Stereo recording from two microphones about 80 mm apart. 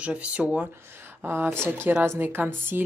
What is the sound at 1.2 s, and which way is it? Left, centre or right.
Speech, right.